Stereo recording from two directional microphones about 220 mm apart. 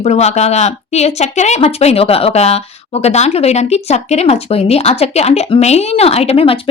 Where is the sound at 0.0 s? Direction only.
30° left (ahead or behind).